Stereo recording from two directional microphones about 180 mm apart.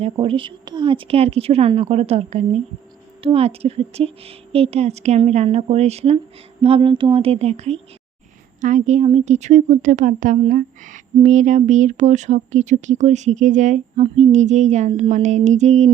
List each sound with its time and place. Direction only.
0.0 s speech: 30° right (ahead or behind)